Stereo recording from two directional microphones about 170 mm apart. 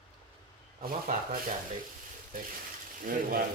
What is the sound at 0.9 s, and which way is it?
Speech, 55° right (ahead or behind).